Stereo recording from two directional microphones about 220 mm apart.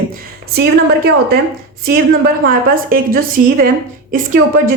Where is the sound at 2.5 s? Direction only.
40° right (ahead or behind).